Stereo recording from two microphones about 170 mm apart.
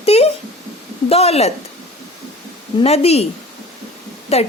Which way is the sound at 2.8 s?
35° left (ahead or behind).